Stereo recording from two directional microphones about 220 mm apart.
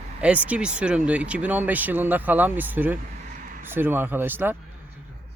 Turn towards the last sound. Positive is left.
turn(degrees=-10)  # may be behind; listen again after turning